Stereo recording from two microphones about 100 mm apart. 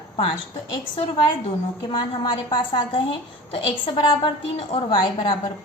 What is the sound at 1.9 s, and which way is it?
A woman's voice, 55° left (ahead or behind).